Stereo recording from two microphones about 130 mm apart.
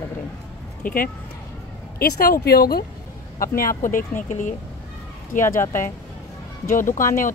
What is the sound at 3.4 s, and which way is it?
Speech, 90° left.